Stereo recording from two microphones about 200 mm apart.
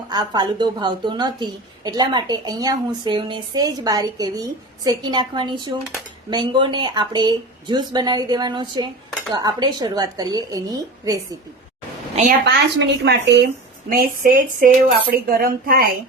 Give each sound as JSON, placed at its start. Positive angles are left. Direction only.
{"t": 0.1, "sound": "a woman's voice", "side_deg": -20}
{"t": 12.5, "sound": "a woman's voice", "side_deg": -55}
{"t": 13.9, "sound": "speech", "side_deg": -45}